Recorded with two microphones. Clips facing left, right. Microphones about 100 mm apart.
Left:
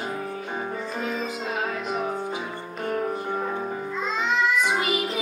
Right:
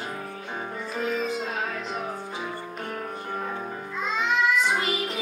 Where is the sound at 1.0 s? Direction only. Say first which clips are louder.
Right 4 dB; centre (ahead or behind).